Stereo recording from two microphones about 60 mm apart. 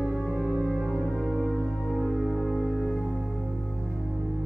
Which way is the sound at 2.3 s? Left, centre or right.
Centre.